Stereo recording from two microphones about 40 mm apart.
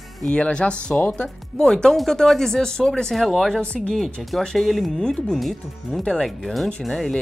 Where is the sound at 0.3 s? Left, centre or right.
Left; by 7.2 s centre.